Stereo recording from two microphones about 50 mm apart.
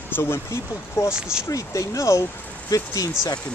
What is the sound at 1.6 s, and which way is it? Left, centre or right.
Speech, left.